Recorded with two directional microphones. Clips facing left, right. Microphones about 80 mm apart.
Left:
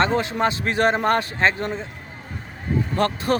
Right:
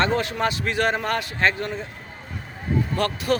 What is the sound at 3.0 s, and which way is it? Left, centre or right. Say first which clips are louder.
Speech: left 4 dB; left.